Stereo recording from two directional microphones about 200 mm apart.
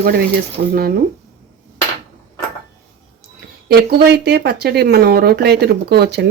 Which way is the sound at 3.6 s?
55° right (ahead or behind).